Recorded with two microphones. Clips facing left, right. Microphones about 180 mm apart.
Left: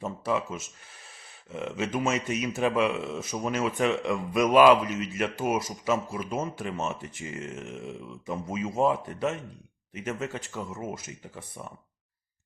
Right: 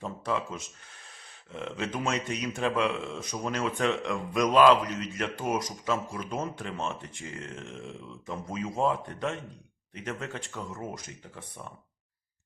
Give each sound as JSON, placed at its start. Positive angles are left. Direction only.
{"t": 0.0, "sound": "speech", "side_deg": 5}